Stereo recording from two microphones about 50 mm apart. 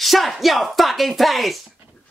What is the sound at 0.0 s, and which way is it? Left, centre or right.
Speech, centre.